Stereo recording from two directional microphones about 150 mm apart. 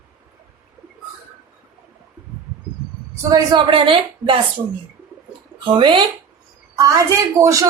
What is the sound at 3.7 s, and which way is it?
Speech, 35° right (ahead or behind).